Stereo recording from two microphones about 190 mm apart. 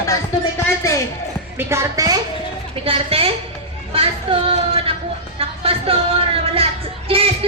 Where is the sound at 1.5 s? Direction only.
15° right (ahead or behind).